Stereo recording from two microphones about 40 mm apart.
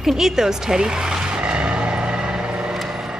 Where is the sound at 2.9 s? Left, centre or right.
Right.